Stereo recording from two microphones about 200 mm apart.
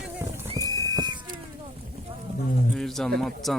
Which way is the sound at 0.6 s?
20° right (ahead or behind).